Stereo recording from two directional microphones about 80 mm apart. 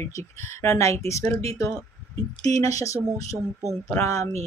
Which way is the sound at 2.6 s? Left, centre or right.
Left.